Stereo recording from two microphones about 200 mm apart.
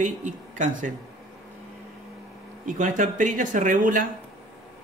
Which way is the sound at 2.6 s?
40° right (ahead or behind).